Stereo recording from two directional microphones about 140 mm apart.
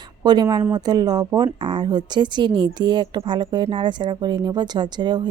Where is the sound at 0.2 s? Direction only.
30° right (ahead or behind).